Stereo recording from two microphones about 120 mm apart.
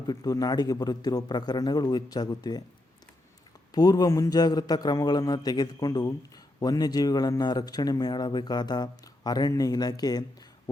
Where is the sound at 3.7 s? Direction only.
35° left (ahead or behind).